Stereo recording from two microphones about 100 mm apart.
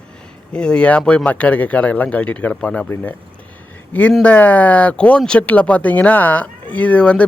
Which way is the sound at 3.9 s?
15° left (ahead or behind).